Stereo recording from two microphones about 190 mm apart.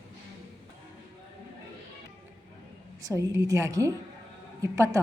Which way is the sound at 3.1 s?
15° right (ahead or behind).